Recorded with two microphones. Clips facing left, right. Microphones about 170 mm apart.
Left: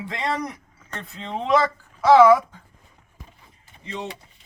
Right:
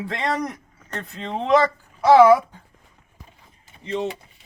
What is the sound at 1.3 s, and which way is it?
Speech, 20° right (ahead or behind).